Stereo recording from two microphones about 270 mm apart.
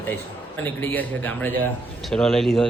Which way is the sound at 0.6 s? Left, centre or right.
Centre.